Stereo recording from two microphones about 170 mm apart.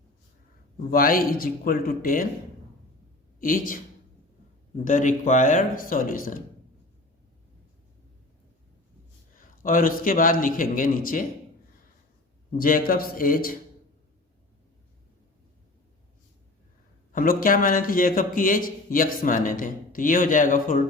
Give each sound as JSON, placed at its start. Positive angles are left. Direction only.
{"t": 0.9, "sound": "speech", "side_deg": 55}
{"t": 3.4, "sound": "a man's voice", "side_deg": 55}
{"t": 4.9, "sound": "a man's voice", "side_deg": 50}
{"t": 9.6, "sound": "a man's voice", "side_deg": 55}
{"t": 12.5, "sound": "speech", "side_deg": 55}
{"t": 17.1, "sound": "a man's voice", "side_deg": 55}